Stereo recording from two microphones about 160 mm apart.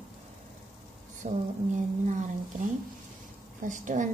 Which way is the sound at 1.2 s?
50° right (ahead or behind).